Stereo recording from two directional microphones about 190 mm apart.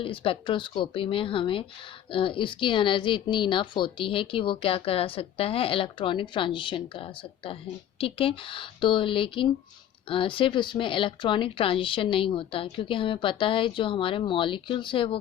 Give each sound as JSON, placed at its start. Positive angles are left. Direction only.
{"t": 0.0, "sound": "a woman's voice", "side_deg": 30}